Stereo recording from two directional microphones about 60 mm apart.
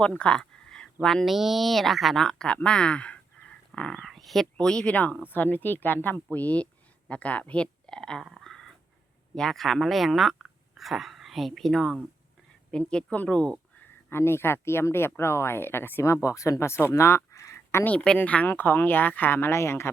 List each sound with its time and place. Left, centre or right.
0.0 s a sound: centre
1.2 s speech: centre
3.4 s dog: left
3.9 s speech: centre
4.5 s speech: centre
5.3 s speech: left; by 8.2 s centre
8.2 s speech: centre
9.3 s speech: centre
14.1 s speech: left
16.1 s speech: left
17.8 s speech: centre
18.4 s speech: left